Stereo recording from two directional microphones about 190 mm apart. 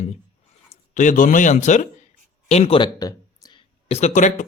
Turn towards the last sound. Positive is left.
turn(degrees=40)  # may be behind; listen again after turning